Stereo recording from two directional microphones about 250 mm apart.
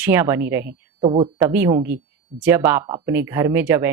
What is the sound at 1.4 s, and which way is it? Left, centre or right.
Speech, centre.